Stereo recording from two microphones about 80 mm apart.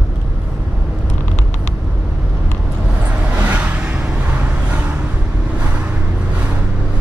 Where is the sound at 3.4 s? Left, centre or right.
Centre.